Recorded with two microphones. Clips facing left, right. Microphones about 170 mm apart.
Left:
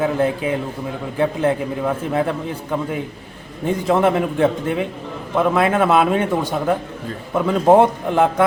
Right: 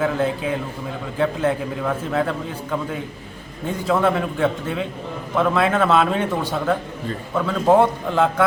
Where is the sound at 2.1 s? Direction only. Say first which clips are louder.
Left 2 dB; 15° left (ahead or behind).